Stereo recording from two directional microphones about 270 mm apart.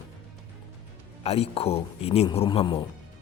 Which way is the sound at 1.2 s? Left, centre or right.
Left.